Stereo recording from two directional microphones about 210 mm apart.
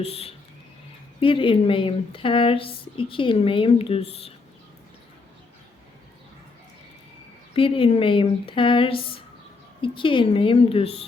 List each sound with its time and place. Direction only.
0.0 s speech: 30° left (ahead or behind)
7.5 s speech: 25° left (ahead or behind)